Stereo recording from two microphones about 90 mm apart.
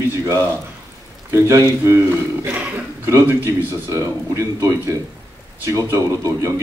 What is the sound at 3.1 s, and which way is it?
Speech, 30° right (ahead or behind).